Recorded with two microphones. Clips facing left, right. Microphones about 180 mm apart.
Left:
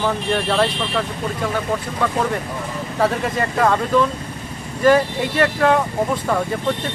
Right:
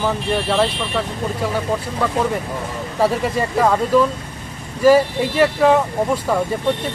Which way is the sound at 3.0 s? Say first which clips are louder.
Right 2 dB; 10° right (ahead or behind).